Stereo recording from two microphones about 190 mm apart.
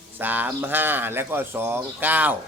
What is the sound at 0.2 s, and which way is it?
Speech, 10° right (ahead or behind).